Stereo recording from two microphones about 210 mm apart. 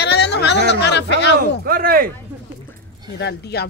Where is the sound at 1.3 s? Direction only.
45° right (ahead or behind).